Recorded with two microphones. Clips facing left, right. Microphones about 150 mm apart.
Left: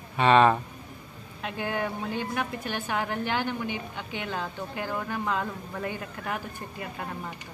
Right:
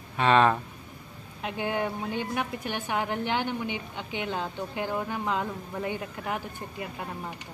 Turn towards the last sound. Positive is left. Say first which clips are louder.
# right 1 dB
turn(degrees=-15)  # may be behind; listen again after turning